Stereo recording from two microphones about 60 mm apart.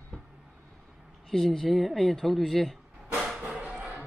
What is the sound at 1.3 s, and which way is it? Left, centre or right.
Speech, centre.